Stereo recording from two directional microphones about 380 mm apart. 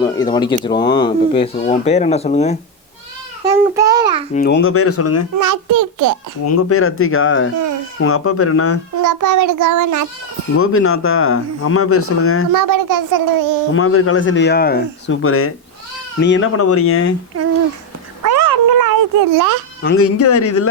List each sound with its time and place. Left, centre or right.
0.0 s speech: centre
3.5 s a child's voice: centre
4.4 s speech: left
5.4 s child singing: right
6.4 s speech: left
9.0 s child singing: right
10.6 s speech: left
12.5 s speech: right
13.7 s speech: left
18.2 s a sound: right
19.8 s speech: left